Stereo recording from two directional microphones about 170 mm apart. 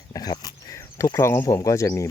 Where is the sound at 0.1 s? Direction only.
25° left (ahead or behind).